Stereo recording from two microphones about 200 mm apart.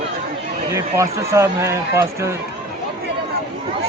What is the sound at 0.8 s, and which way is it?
Speech, 15° right (ahead or behind).